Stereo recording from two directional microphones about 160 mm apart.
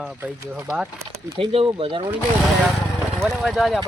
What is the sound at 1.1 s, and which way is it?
Speech, 35° right (ahead or behind).